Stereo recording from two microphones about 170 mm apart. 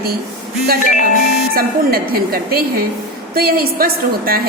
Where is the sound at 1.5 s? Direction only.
60° right (ahead or behind).